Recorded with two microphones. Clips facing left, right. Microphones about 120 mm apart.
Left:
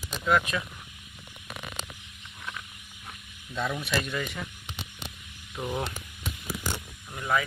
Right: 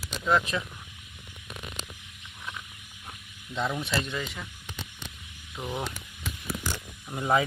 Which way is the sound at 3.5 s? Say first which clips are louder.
Even; 20° right (ahead or behind).